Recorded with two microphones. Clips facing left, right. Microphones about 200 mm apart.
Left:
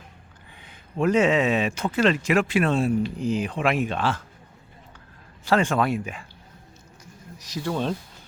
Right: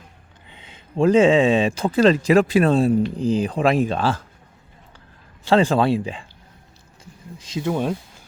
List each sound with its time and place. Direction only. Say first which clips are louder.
0.5 s speech: right 5 dB; 25° right (ahead or behind)
5.5 s speech: right 5 dB; 30° right (ahead or behind)
7.3 s speech: right 4 dB; 20° right (ahead or behind)